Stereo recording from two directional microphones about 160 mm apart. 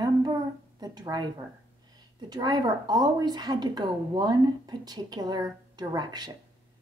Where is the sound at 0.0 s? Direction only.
25° right (ahead or behind).